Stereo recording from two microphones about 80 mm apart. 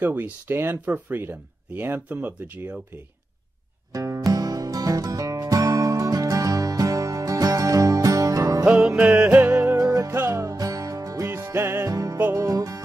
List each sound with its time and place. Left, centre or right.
0.0 s speech: right
3.9 s music: right
8.6 s music: centre
9.8 s music: right
10.5 s music: right
11.9 s music: right